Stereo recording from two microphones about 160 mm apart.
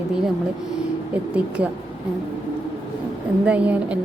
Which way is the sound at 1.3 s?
5° right (ahead or behind).